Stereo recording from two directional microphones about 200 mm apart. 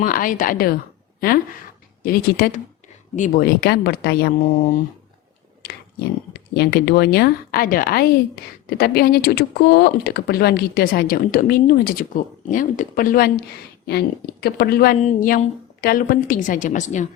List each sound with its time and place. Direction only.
0.0 s speech: 45° left (ahead or behind)
5.6 s speech: 55° left (ahead or behind)
14.4 s speech: 50° left (ahead or behind)
14.9 s a woman's voice: 40° left (ahead or behind)